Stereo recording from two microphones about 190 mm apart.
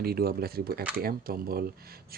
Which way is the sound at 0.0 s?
55° right (ahead or behind).